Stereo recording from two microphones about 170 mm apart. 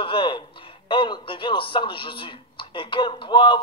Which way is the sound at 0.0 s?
30° left (ahead or behind).